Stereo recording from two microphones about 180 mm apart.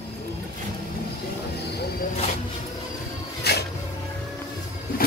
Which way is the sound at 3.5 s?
65° left (ahead or behind).